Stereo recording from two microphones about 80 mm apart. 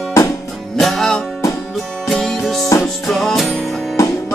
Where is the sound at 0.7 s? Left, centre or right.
Centre.